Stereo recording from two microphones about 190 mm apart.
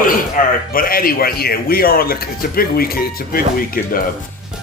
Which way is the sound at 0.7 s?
50° left (ahead or behind).